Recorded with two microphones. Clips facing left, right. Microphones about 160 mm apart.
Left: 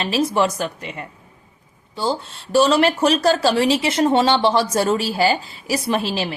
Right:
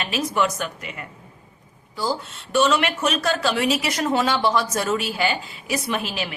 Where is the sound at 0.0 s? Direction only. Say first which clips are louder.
Left 4 dB; 30° left (ahead or behind).